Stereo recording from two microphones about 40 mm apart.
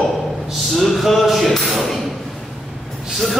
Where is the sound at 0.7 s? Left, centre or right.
Centre.